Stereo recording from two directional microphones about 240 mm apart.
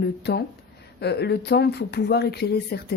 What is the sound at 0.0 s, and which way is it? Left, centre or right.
Speech, left.